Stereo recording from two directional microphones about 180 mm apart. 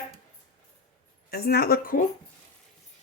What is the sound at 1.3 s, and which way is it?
Speech, 60° left (ahead or behind).